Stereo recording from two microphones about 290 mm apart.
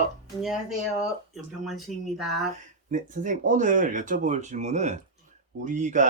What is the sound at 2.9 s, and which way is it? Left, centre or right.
Speech, right.